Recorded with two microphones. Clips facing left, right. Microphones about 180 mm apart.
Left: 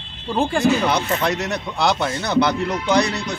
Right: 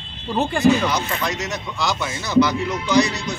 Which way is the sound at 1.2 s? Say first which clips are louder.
Left 4 dB; 60° left (ahead or behind).